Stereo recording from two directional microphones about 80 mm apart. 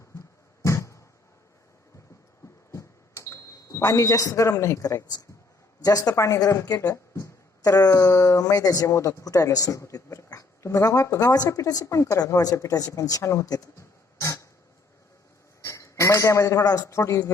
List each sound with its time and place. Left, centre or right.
0.6 s a sound: left
2.7 s smoke detector: left
5.8 s speech: left
12.2 s speech: left
14.2 s a sound: left
15.6 s a man's voice: left